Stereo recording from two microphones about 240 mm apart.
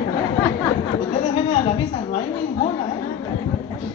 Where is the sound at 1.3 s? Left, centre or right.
Left.